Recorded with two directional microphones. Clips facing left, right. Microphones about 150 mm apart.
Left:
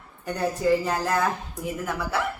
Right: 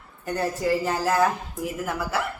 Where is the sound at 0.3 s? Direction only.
Centre (ahead or behind).